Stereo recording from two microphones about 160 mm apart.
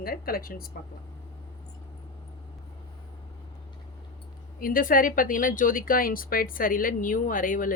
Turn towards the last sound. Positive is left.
turn(degrees=60)  # may be behind; listen again after turning